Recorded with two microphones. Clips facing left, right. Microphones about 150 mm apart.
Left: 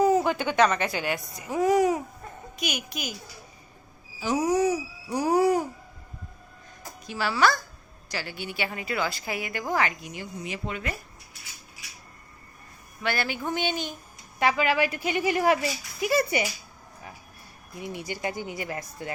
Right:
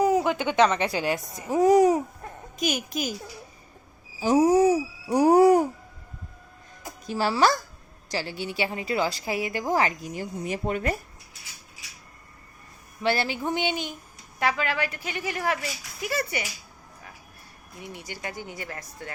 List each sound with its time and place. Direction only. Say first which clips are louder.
0.0 s a woman's voice: even; 10° right (ahead or behind); by 3.2 s 40° right (ahead or behind)
4.5 s hoot: right 4 dB; 50° right (ahead or behind)
7.1 s a woman's voice: right 2 dB; 35° right (ahead or behind)
13.0 s speech: right 3 dB; 30° right (ahead or behind)
14.3 s speech: left 3 dB; 5° left (ahead or behind)
17.9 s speech: left 5 dB; 15° left (ahead or behind)